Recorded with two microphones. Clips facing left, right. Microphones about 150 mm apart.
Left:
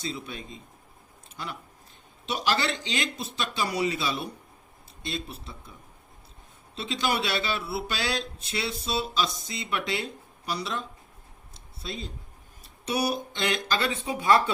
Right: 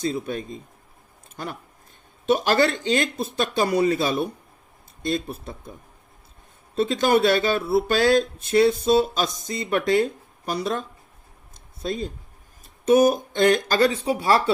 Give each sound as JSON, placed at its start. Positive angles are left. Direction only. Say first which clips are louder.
{"t": 0.0, "sound": "speech", "louder": "right 9 dB", "side_deg": -50}
{"t": 6.7, "sound": "speech", "louder": "right 9 dB", "side_deg": -50}
{"t": 11.5, "sound": "a sound", "louder": "right 9 dB", "side_deg": -50}
{"t": 12.6, "sound": "speech", "louder": "right 12 dB", "side_deg": -45}